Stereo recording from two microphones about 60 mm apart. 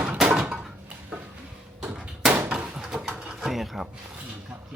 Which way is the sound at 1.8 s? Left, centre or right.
Centre.